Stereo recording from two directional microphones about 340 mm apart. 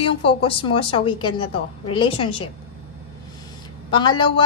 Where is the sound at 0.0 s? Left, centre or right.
Centre.